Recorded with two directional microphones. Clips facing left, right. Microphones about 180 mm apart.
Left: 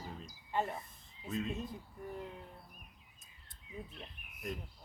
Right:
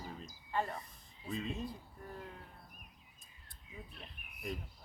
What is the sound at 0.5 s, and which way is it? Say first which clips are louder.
Speech: left 1 dB; 20° left (ahead or behind).